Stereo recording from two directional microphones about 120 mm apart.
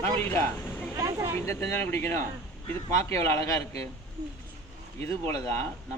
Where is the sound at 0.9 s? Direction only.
25° right (ahead or behind).